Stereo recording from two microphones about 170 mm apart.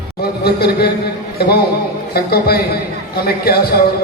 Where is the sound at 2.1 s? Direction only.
65° left (ahead or behind).